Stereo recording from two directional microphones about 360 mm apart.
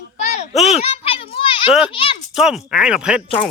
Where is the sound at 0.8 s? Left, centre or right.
Centre.